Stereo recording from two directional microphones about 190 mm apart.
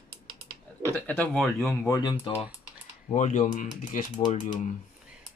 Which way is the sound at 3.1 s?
40° left (ahead or behind).